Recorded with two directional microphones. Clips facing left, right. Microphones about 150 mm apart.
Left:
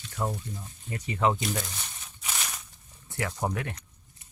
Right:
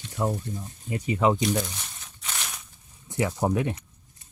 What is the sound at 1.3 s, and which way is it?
Crumpling, centre (ahead or behind).